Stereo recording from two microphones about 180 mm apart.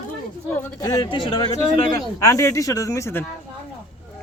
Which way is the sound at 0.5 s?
20° left (ahead or behind).